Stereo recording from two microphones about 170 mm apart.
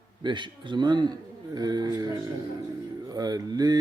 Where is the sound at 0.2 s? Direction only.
25° right (ahead or behind).